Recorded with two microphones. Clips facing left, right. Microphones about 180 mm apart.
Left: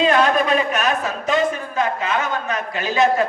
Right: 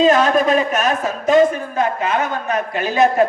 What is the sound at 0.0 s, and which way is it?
A man's voice, 40° right (ahead or behind).